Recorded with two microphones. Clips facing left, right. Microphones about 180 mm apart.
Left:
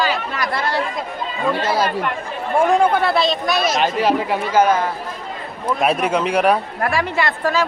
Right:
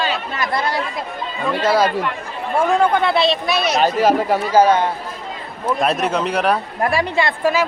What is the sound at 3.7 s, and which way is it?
Speech, 40° right (ahead or behind).